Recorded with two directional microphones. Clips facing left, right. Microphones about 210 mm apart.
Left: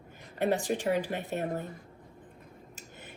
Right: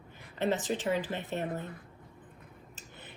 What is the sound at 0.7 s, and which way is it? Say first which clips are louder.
Speech: left 2 dB; 55° left (ahead or behind).